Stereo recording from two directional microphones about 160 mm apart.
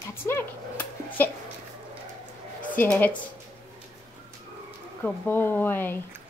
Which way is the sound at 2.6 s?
10° left (ahead or behind).